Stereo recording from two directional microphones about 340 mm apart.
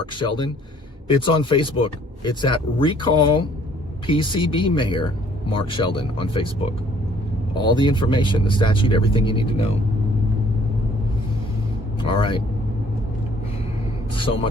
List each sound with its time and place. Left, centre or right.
0.0 s speech: centre
7.5 s speech: centre
12.0 s speech: centre